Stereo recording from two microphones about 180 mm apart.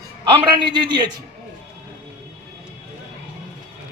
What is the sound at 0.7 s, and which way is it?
Speech, 25° right (ahead or behind).